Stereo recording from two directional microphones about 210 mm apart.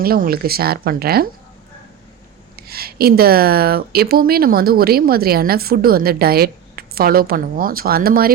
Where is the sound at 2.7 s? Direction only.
45° right (ahead or behind).